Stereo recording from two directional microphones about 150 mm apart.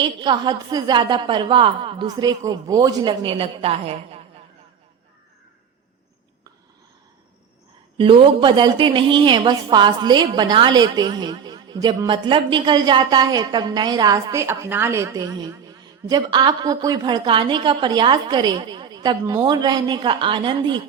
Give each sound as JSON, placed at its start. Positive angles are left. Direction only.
{"t": 0.0, "sound": "a woman's voice", "side_deg": -30}
{"t": 7.9, "sound": "a woman's voice", "side_deg": -35}